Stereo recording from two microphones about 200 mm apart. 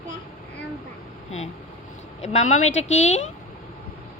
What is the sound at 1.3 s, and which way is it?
Vehicle, 30° left (ahead or behind).